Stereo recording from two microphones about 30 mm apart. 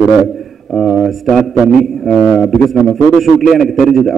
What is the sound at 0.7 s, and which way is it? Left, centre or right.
A man's voice, centre.